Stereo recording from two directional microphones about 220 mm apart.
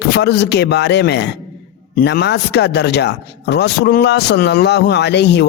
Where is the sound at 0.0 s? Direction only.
50° left (ahead or behind).